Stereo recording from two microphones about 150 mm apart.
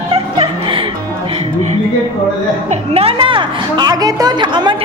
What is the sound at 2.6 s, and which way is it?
A woman's voice, 40° right (ahead or behind).